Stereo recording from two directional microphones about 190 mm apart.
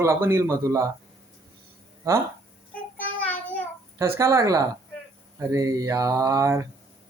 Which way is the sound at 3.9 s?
15° right (ahead or behind).